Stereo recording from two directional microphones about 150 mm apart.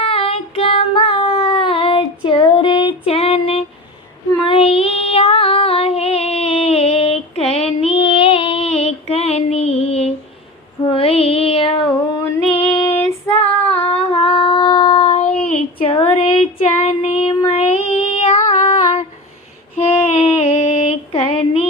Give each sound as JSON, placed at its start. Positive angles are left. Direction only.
{"t": 0.0, "sound": "child singing", "side_deg": 40}
{"t": 4.4, "sound": "female singing", "side_deg": 40}
{"t": 10.9, "sound": "child singing", "side_deg": 40}
{"t": 13.3, "sound": "female singing", "side_deg": 45}
{"t": 13.9, "sound": "humming", "side_deg": 40}
{"t": 14.9, "sound": "child singing", "side_deg": 40}
{"t": 15.3, "sound": "child singing", "side_deg": 10}
{"t": 15.8, "sound": "a sound", "side_deg": 35}
{"t": 19.7, "sound": "child singing", "side_deg": 40}